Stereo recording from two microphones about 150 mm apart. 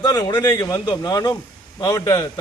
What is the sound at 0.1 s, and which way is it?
A man's voice, 25° left (ahead or behind).